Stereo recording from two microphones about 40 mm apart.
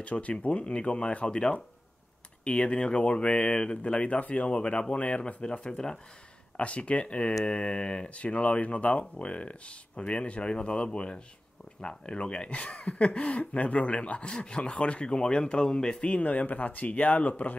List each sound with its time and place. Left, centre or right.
0.0 s speech: left
16.2 s speech: left